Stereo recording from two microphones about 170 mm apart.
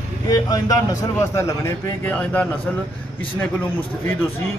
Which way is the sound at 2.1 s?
5° left (ahead or behind).